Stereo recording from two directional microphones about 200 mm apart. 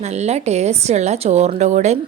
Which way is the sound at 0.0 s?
35° right (ahead or behind).